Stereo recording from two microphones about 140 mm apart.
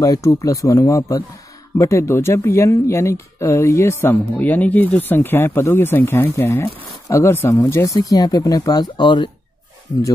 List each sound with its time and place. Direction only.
0.0 s speech: 25° left (ahead or behind)